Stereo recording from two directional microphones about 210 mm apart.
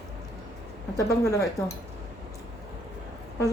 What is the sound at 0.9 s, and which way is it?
Speech, 15° left (ahead or behind).